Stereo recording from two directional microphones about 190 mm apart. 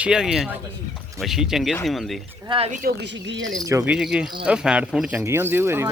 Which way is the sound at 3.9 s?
5° right (ahead or behind).